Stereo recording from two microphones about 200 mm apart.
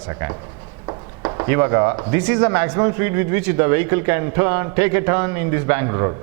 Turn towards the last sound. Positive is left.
turn(degrees=-20)  # may be behind; listen again after turning